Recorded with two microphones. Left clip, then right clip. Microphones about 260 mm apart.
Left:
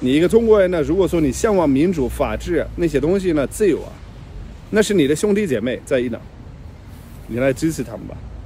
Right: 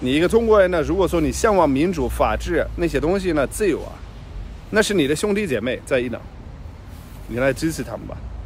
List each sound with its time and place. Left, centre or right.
0.0 s speech: centre
7.3 s speech: centre